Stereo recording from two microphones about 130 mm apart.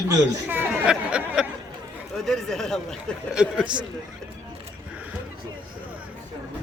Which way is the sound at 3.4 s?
10° right (ahead or behind).